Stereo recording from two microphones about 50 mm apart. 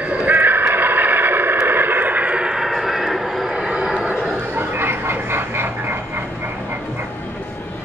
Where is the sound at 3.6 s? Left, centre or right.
Centre.